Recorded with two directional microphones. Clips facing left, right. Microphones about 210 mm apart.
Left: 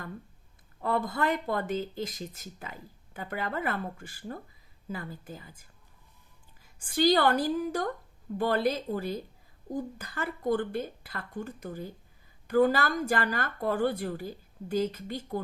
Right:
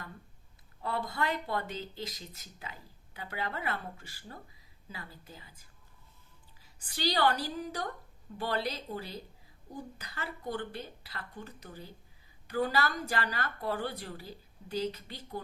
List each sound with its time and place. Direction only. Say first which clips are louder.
0.8 s speech: left 5 dB; 50° left (ahead or behind)
6.7 s speech: left 8 dB; 50° left (ahead or behind)